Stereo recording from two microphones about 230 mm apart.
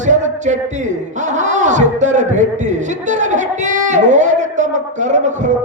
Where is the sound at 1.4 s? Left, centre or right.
Right.